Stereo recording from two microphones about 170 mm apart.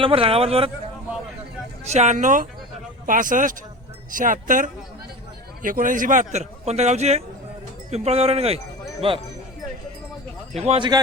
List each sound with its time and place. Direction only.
0.0 s a man's voice: 35° right (ahead or behind)
1.8 s a man's voice: 40° right (ahead or behind)
10.5 s a man's voice: 35° right (ahead or behind)